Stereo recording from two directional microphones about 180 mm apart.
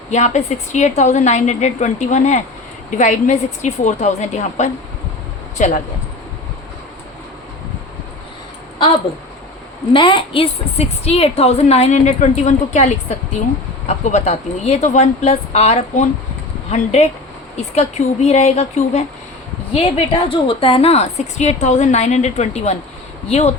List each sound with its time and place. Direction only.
0.1 s a woman's voice: 40° left (ahead or behind)
9.9 s a woman's voice: 25° left (ahead or behind)